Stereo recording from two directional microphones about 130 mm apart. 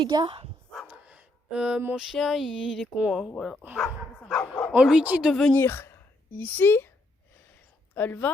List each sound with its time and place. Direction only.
0.0 s speech: 40° right (ahead or behind)
0.9 s speech: 10° right (ahead or behind)
4.2 s dog: 5° left (ahead or behind)
4.8 s speech: 5° right (ahead or behind)
5.3 s speech: centre (ahead or behind)
5.5 s speech: 20° left (ahead or behind)
7.9 s speech: 15° left (ahead or behind)